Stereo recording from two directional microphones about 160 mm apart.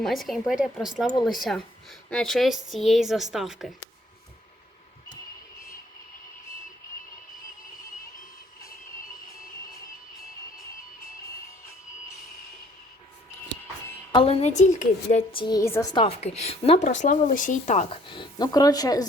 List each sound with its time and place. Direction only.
0.0 s speech: centre (ahead or behind)
14.1 s speech: 35° left (ahead or behind); by 15.2 s 50° left (ahead or behind)
15.3 s speech: 30° left (ahead or behind)
16.0 s speech: 40° left (ahead or behind)
18.1 s speech: 25° left (ahead or behind)